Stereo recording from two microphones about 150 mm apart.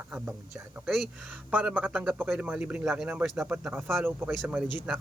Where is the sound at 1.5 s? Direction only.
10° right (ahead or behind).